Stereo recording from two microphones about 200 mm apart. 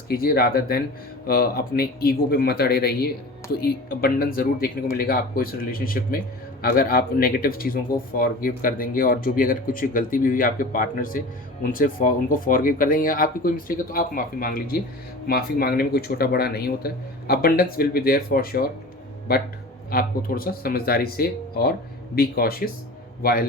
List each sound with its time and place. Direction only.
0.1 s speech: 50° left (ahead or behind)
19.9 s speech: 45° left (ahead or behind)